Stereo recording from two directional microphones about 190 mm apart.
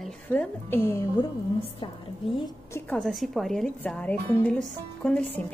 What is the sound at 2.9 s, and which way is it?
Speech, centre (ahead or behind).